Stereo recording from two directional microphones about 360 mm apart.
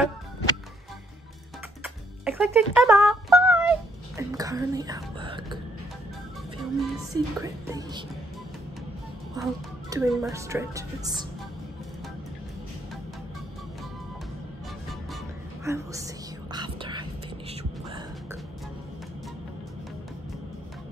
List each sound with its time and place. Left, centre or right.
2.2 s a sound: centre
4.2 s whispering: centre
6.6 s a woman's voice: centre
9.3 s a woman's voice: centre
15.6 s a woman's voice: centre
16.5 s whispering: centre